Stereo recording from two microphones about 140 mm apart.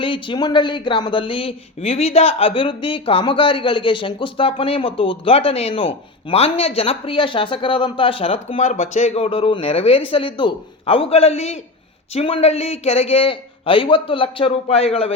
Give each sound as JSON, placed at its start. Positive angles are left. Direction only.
{"t": 0.0, "sound": "speech", "side_deg": 35}